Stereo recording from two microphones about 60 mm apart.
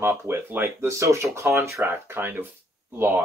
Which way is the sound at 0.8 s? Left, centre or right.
Right.